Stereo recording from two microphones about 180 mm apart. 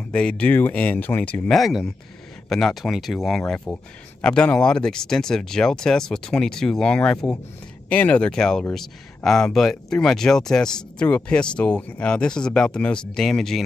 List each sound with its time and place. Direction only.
0.1 s speech: 5° left (ahead or behind)